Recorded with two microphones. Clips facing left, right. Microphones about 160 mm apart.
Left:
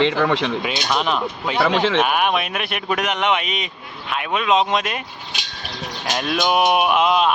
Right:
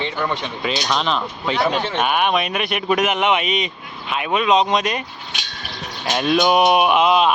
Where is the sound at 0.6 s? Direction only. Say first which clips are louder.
Even; 5° left (ahead or behind).